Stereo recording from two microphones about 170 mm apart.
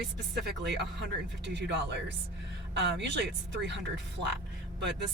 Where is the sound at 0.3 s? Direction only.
85° right.